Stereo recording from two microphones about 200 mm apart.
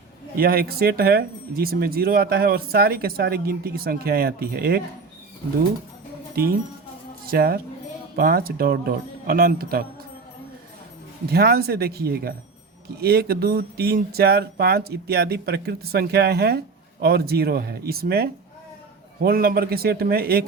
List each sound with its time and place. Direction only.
0.3 s speech: 50° right (ahead or behind)
6.3 s speech: 50° right (ahead or behind)
11.3 s speech: 50° right (ahead or behind)